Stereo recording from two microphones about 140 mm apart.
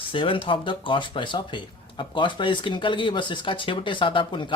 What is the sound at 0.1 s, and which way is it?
Speech, 40° left (ahead or behind).